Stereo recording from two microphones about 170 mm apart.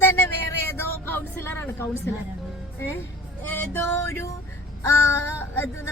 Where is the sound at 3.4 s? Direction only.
10° left (ahead or behind).